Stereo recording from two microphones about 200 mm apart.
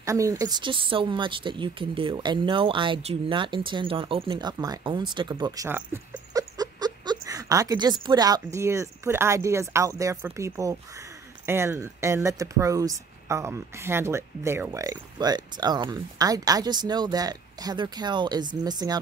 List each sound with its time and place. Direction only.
0.0 s speech: 15° right (ahead or behind)